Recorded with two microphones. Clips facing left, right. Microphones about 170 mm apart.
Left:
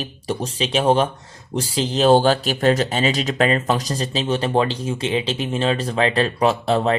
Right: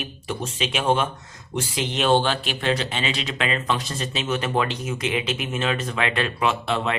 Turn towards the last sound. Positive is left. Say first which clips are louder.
# left 6 dB
turn(degrees=35)  # may be behind; listen again after turning